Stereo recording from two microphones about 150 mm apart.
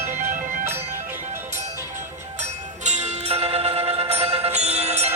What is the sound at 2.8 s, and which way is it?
Music, 50° right (ahead or behind).